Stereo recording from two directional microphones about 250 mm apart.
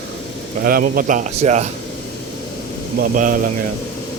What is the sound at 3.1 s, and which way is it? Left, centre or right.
Speech, right.